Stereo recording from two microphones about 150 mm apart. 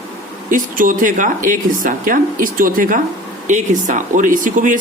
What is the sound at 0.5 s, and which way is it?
Speech, 65° right (ahead or behind).